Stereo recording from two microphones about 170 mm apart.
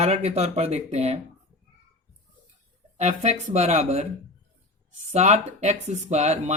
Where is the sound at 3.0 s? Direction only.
40° right (ahead or behind).